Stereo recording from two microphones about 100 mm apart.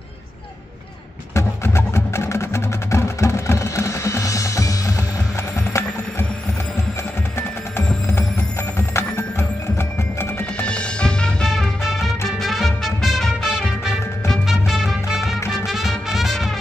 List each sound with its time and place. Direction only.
1.3 s music: 25° left (ahead or behind)
8.1 s music: 25° left (ahead or behind)
10.6 s music: 10° left (ahead or behind)